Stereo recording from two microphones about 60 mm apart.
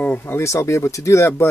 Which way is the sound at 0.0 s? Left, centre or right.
Left.